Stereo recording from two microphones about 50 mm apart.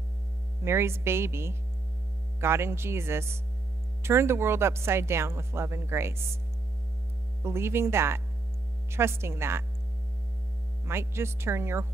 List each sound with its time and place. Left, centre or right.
0.7 s speech: right
7.4 s speech: right
10.9 s speech: right